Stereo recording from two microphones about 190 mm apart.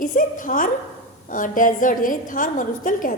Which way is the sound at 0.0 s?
45° left (ahead or behind).